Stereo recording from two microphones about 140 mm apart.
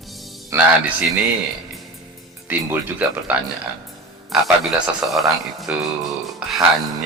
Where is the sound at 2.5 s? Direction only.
15° right (ahead or behind).